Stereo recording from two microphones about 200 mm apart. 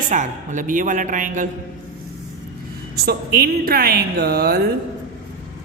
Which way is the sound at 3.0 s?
50° right (ahead or behind).